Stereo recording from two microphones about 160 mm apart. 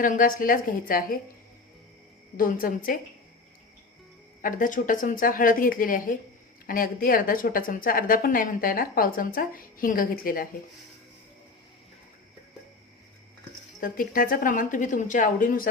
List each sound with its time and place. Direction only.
0.0 s a woman's voice: 60° left (ahead or behind)
2.3 s a woman's voice: 60° left (ahead or behind)
4.4 s a woman's voice: 55° left (ahead or behind)
13.8 s a woman's voice: 60° left (ahead or behind)